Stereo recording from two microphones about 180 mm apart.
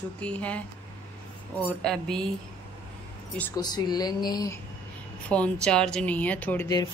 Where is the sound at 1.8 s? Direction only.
5° left (ahead or behind).